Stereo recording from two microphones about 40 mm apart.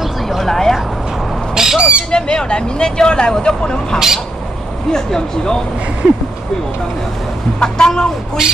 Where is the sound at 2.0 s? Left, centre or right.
Left.